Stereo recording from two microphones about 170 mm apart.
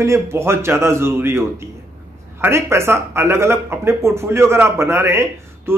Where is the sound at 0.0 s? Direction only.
15° right (ahead or behind).